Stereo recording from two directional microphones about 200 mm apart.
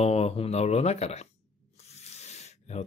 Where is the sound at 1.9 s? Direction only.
35° left (ahead or behind).